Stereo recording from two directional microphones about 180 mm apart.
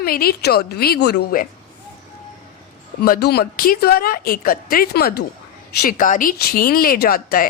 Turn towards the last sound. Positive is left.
turn(degrees=55)  # may be behind; listen again after turning